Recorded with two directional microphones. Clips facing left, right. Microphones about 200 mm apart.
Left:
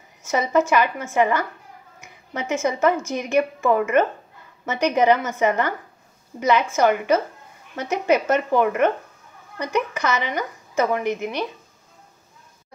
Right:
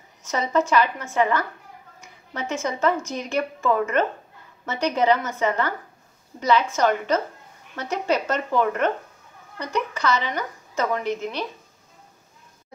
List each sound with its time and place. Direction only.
0.3 s a woman's voice: 10° left (ahead or behind)